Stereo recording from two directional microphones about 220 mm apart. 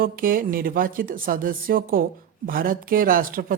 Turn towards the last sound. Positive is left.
turn(degrees=-40)  # may be behind; listen again after turning